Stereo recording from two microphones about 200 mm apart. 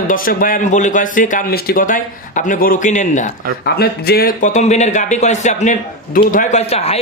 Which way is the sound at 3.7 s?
50° left (ahead or behind).